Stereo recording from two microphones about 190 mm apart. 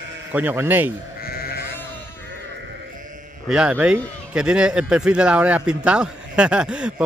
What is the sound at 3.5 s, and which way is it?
Speech, 5° right (ahead or behind).